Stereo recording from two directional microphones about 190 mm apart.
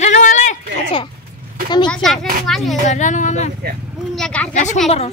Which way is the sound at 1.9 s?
Centre (ahead or behind).